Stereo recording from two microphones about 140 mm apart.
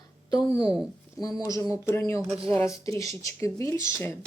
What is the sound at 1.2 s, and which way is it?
Speech, 25° left (ahead or behind).